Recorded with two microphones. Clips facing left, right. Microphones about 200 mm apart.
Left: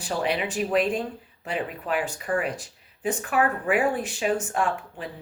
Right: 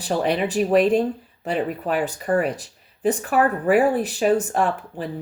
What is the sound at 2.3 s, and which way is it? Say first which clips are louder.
Speech: right 6 dB; 40° right (ahead or behind).